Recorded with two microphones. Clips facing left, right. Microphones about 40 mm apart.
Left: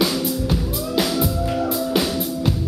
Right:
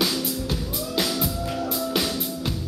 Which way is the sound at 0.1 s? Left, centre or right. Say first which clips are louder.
Left 5 dB; centre.